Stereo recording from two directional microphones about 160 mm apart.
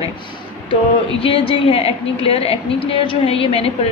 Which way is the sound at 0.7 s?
35° left (ahead or behind).